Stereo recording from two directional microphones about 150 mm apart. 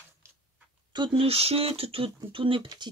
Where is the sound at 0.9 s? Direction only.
35° right (ahead or behind).